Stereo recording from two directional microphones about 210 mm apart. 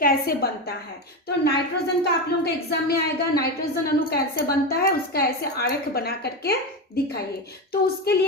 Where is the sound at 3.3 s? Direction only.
50° left (ahead or behind).